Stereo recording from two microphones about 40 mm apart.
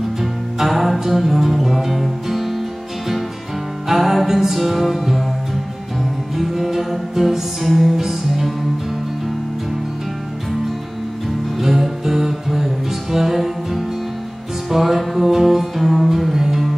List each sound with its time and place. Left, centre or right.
0.2 s music: centre
3.9 s music: centre
6.3 s music: centre
11.6 s music: centre